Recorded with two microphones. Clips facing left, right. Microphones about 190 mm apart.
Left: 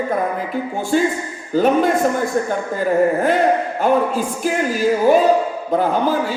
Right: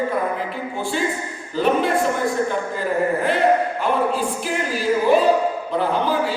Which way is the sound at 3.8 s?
45° left (ahead or behind).